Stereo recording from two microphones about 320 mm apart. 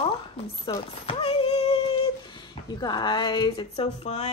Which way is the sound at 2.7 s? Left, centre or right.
Centre.